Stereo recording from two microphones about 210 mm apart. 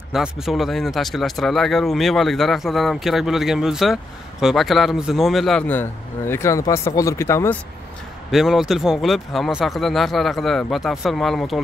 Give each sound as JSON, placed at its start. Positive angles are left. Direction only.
{"t": 0.1, "sound": "speech", "side_deg": 0}
{"t": 8.3, "sound": "speech", "side_deg": 0}